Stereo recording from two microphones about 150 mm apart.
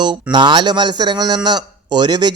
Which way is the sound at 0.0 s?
30° right (ahead or behind).